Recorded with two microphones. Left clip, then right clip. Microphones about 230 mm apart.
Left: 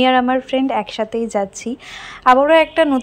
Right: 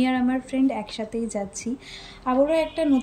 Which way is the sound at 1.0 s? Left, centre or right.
Left.